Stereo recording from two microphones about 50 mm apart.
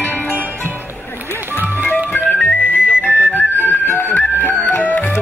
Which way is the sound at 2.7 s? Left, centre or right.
Left.